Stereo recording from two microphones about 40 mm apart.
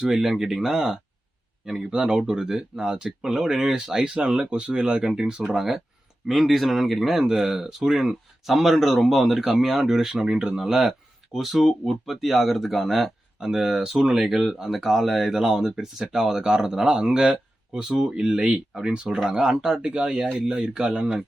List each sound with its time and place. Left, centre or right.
0.0 s speech: centre
1.9 s speech: right
4.0 s speech: right
5.0 s speech: centre
10.2 s speech: right
10.6 s speech: centre
18.4 s speech: right
19.1 s speech: centre